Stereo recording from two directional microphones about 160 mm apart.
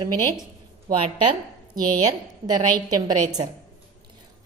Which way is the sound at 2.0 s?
25° right (ahead or behind).